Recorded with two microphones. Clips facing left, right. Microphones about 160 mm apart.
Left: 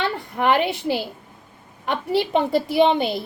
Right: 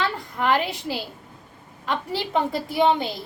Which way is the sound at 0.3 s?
60° left (ahead or behind).